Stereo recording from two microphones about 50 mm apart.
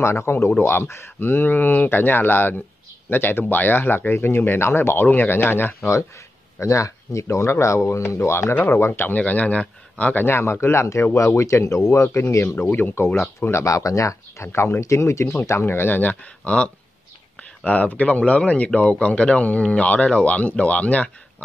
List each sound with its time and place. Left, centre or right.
0.0 s speech: left
0.5 s speech: left
1.2 s speech: left
4.1 s speech: left
5.0 s speech: left
5.3 s speech: left
6.6 s speech: left
9.0 s speech: left
10.2 s speech: left
11.1 s speech: left
11.9 s speech: left
12.3 s speech: left
12.9 s speech: left
13.5 s a man's voice: left